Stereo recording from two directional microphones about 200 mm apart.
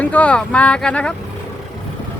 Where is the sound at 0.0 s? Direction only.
5° left (ahead or behind).